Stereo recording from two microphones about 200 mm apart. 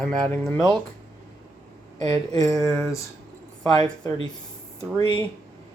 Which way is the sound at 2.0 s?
20° left (ahead or behind).